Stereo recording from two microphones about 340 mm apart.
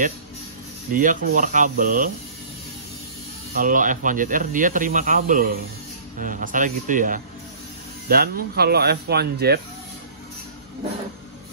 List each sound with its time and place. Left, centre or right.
0.9 s speech: right
3.5 s speech: right